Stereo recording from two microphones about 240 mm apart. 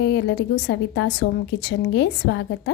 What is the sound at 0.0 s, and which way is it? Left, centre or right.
A woman's voice, left.